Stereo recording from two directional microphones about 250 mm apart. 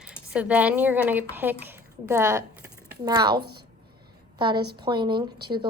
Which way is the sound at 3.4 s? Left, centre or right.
Right.